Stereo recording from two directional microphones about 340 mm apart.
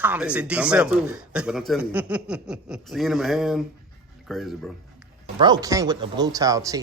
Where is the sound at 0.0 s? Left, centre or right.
Centre.